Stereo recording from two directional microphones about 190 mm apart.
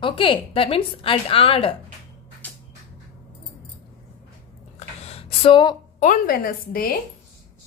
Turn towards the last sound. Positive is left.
turn(degrees=50)  # may be behind; listen again after turning